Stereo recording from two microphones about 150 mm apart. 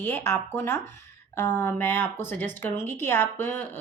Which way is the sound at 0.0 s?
15° left (ahead or behind).